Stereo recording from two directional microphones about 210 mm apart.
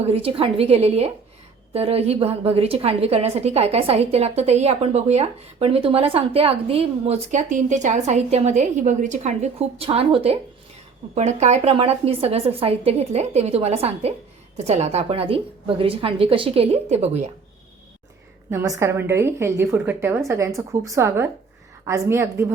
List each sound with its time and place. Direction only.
0.0 s a woman's voice: 30° right (ahead or behind)
18.5 s a woman's voice: 15° right (ahead or behind)